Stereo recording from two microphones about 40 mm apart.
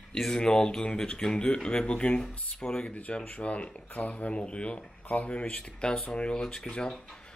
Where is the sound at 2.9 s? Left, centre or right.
Left; by 7.0 s centre.